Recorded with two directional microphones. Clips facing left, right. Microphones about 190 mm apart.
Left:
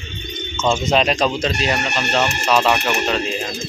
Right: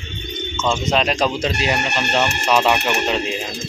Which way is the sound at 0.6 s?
15° left (ahead or behind).